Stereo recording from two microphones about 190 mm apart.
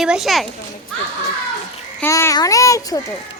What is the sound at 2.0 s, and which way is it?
A child's voice, 15° left (ahead or behind).